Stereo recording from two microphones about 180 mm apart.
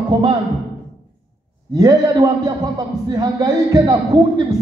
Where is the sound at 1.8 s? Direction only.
20° right (ahead or behind).